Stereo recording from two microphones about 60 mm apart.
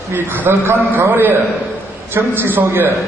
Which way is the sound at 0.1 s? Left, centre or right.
Right.